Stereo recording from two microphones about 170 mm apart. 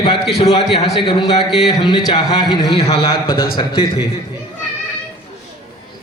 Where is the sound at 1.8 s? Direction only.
25° left (ahead or behind).